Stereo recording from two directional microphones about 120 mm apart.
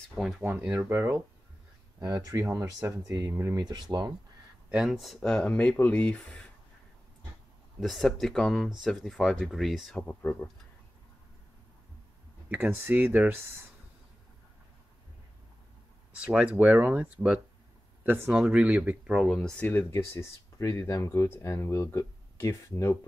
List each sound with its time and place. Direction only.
0.1 s speech: centre (ahead or behind)
0.4 s speech: 15° right (ahead or behind)
2.0 s speech: 35° right (ahead or behind)
3.6 s speech: 35° right (ahead or behind)
4.6 s speech: 5° right (ahead or behind)
7.8 s speech: centre (ahead or behind)
12.4 s speech: 15° right (ahead or behind)
16.1 s speech: 10° right (ahead or behind)
19.1 s speech: centre (ahead or behind); by 22.9 s 20° left (ahead or behind)